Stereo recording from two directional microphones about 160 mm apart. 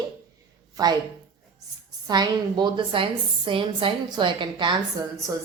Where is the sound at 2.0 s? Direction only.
25° right (ahead or behind).